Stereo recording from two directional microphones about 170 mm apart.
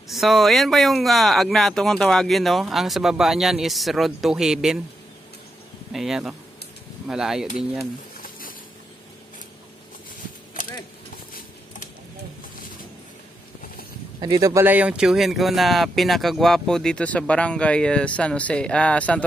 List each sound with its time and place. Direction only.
0.1 s speech: centre (ahead or behind)
5.9 s speech: 5° right (ahead or behind)
8.2 s a sound: 55° left (ahead or behind)
14.2 s speech: 20° right (ahead or behind); by 19.2 s 10° left (ahead or behind)